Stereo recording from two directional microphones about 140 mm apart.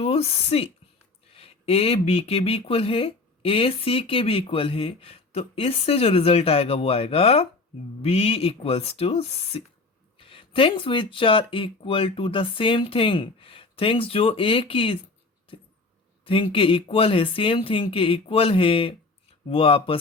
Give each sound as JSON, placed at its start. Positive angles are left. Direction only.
{"t": 0.0, "sound": "speech", "side_deg": 45}
{"t": 16.2, "sound": "speech", "side_deg": 40}